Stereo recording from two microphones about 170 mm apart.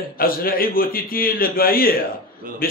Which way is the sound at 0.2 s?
60° left (ahead or behind).